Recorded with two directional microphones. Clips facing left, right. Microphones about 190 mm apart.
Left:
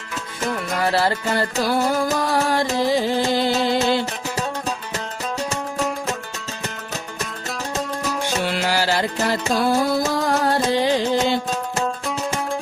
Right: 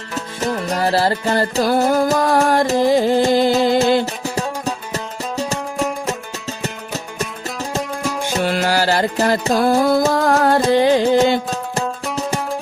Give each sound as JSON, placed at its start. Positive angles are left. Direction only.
{"t": 0.4, "sound": "music", "side_deg": -35}
{"t": 8.4, "sound": "music", "side_deg": -45}